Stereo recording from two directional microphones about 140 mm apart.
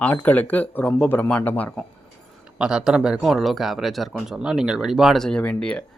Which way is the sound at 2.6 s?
5° right (ahead or behind).